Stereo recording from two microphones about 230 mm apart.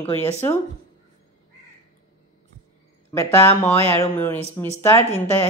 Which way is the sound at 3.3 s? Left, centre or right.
Centre.